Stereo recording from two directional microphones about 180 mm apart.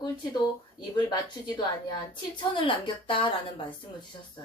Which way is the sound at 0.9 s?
25° left (ahead or behind).